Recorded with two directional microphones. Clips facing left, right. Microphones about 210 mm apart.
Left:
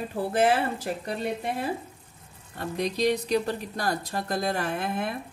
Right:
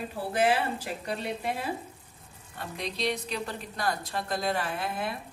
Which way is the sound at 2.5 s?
40° left (ahead or behind).